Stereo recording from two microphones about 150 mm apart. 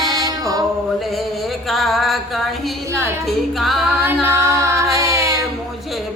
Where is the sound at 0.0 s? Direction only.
25° right (ahead or behind).